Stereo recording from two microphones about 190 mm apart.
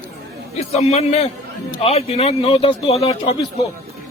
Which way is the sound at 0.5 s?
35° left (ahead or behind).